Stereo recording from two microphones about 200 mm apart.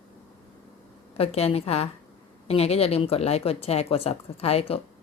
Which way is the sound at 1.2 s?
30° left (ahead or behind).